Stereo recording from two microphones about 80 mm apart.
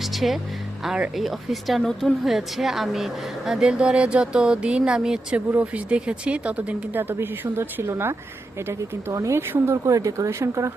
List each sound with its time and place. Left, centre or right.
0.0 s music: centre
1.1 s a woman's voice: centre; by 8.1 s right
9.1 s speech: right